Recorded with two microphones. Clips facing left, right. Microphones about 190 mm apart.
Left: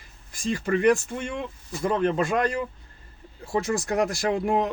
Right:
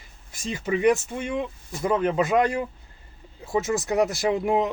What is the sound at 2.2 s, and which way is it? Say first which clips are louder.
Speech: right 3 dB; 20° right (ahead or behind).